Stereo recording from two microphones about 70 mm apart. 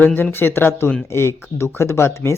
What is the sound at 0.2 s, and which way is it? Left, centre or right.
Speech, left.